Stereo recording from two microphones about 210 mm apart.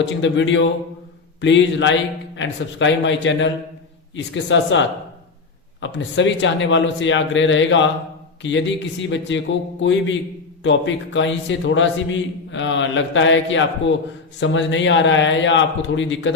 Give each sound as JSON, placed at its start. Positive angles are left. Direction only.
{"t": 0.2, "sound": "a man's voice", "side_deg": 60}